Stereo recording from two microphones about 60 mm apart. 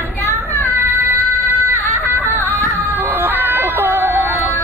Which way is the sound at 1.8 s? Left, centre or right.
Left.